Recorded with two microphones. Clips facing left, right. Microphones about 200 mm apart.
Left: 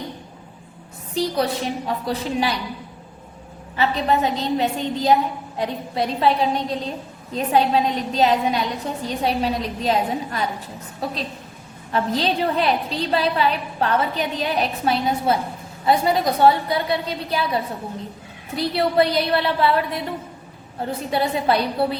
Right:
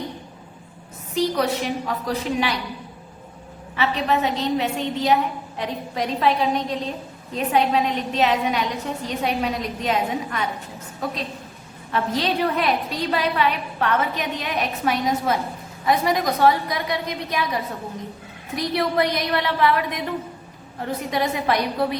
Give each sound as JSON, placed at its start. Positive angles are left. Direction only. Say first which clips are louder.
{"t": 1.1, "sound": "a woman's voice", "louder": "even", "side_deg": 35}
{"t": 3.8, "sound": "a woman's voice", "louder": "left 2 dB", "side_deg": 35}
{"t": 21.1, "sound": "a woman's voice", "louder": "left 2 dB", "side_deg": 30}